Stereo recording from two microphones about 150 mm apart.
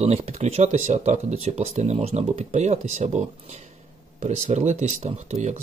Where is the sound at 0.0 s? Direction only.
45° right (ahead or behind).